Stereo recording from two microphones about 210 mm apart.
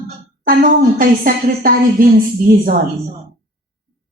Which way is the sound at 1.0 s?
40° right (ahead or behind).